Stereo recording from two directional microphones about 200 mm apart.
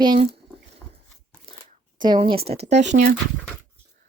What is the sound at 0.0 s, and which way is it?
Speech, 20° right (ahead or behind).